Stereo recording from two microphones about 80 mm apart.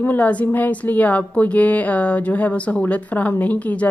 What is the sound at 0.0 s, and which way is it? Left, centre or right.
Speech, left.